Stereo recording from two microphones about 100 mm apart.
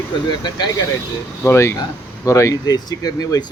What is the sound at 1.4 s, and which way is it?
Speech, 25° left (ahead or behind).